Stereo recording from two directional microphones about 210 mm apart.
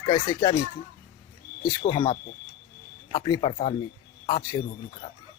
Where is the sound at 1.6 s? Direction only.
20° left (ahead or behind).